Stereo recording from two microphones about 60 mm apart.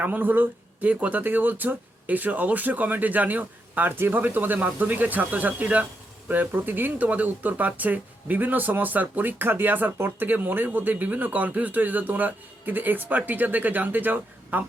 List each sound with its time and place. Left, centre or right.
0.0 s speech: right